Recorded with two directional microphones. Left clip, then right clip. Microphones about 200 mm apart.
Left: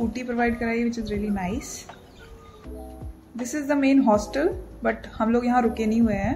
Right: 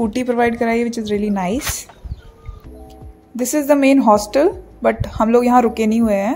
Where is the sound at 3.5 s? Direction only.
30° right (ahead or behind).